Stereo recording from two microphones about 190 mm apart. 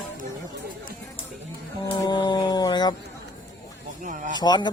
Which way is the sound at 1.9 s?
25° left (ahead or behind).